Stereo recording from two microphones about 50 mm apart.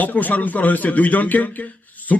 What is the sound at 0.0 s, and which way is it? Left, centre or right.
A man's voice, left.